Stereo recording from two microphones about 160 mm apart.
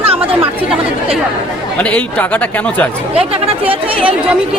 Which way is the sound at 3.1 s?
40° right (ahead or behind).